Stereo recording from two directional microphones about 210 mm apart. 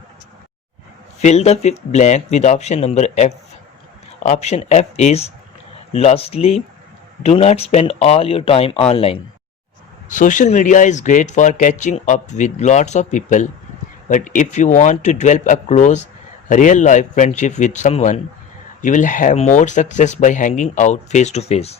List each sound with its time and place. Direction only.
1.2 s speech: 30° left (ahead or behind)